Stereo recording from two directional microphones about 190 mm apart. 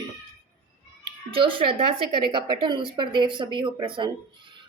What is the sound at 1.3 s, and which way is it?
A woman's voice, 30° right (ahead or behind).